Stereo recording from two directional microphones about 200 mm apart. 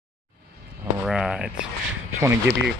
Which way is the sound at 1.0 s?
Centre (ahead or behind).